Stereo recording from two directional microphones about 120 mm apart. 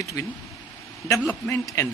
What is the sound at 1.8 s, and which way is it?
Speech, 25° left (ahead or behind).